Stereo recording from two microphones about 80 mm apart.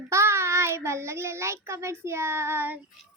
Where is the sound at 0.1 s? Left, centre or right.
Right.